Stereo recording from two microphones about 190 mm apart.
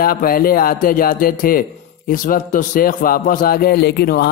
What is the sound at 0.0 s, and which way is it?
A man's voice, 50° left (ahead or behind).